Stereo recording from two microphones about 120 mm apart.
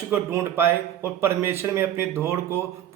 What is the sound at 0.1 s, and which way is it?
Speech, 20° right (ahead or behind).